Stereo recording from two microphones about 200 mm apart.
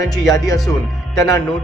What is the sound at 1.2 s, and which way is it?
Speech, 15° left (ahead or behind).